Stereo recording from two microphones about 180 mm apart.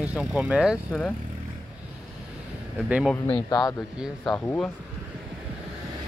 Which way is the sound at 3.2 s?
25° left (ahead or behind).